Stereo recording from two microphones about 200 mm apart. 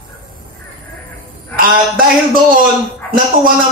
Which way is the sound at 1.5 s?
45° right (ahead or behind).